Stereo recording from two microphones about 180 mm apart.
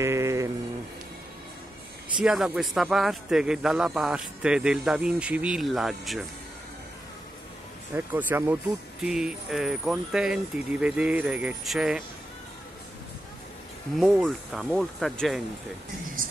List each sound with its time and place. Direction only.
0.0 s sheep: 15° right (ahead or behind)
2.2 s a man's voice: 5° right (ahead or behind)
7.9 s a man's voice: 10° right (ahead or behind)
14.2 s a man's voice: centre (ahead or behind)
16.2 s speech: 50° right (ahead or behind)